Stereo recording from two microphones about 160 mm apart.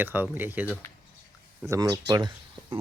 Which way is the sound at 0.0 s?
10° right (ahead or behind).